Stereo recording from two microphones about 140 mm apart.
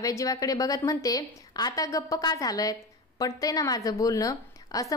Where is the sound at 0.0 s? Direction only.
25° left (ahead or behind).